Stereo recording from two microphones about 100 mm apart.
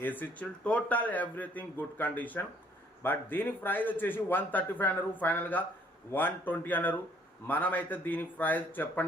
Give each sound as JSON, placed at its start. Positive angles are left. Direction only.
{"t": 0.0, "sound": "a man's voice", "side_deg": 20}